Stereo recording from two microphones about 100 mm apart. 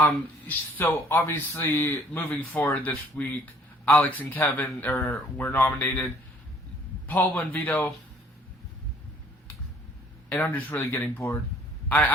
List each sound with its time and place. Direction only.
0.0 s speech: 20° left (ahead or behind)
7.1 s speech: 15° left (ahead or behind)
10.2 s speech: 15° left (ahead or behind)
10.9 s speech: 25° left (ahead or behind)
11.9 s a man's voice: 15° left (ahead or behind)